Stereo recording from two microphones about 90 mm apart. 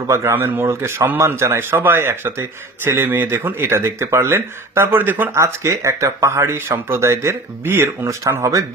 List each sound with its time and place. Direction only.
0.0 s a man's voice: 30° right (ahead or behind)
5.3 s speech: 30° right (ahead or behind)